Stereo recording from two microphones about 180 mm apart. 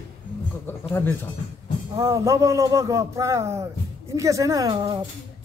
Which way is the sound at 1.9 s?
15° right (ahead or behind).